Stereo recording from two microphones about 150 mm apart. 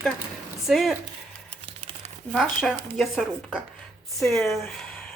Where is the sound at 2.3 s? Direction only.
Centre (ahead or behind).